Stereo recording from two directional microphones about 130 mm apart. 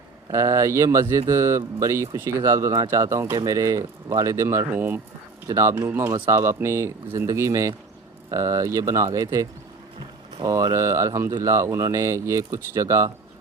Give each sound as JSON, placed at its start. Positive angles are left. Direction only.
{"t": 0.3, "sound": "speech", "side_deg": -25}